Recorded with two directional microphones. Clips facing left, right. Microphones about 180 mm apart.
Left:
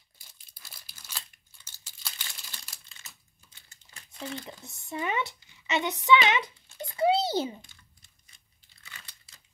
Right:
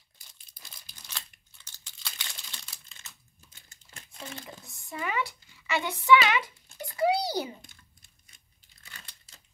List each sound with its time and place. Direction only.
0.5 s crumpling: 5° left (ahead or behind)
4.6 s speech: 20° left (ahead or behind)
8.8 s crumpling: 40° right (ahead or behind)